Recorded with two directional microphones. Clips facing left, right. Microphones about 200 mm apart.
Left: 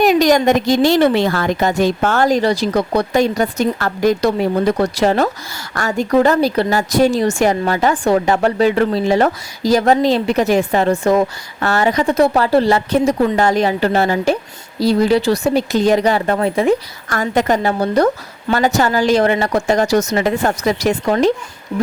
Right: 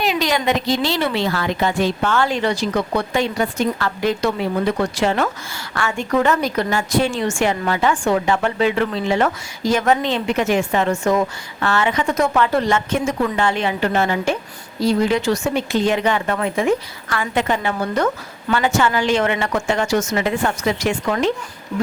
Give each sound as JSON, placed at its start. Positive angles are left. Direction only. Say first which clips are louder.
{"t": 0.0, "sound": "a woman's voice", "louder": "left 8 dB", "side_deg": 45}